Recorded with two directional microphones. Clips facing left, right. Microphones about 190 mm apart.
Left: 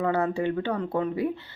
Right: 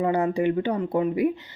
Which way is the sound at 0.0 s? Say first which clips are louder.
Right 3 dB; 15° right (ahead or behind).